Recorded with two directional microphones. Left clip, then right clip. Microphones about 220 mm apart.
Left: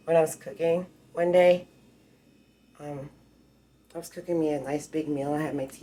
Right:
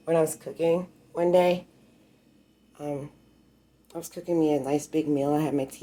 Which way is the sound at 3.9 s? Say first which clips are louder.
Right 2 dB; 45° right (ahead or behind).